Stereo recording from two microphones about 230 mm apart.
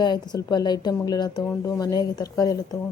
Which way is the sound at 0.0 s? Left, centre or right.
Centre.